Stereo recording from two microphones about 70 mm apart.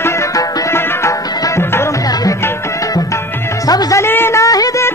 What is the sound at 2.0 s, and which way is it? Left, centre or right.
Music, left.